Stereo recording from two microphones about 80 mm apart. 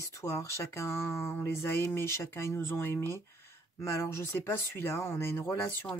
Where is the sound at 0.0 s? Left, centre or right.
Left.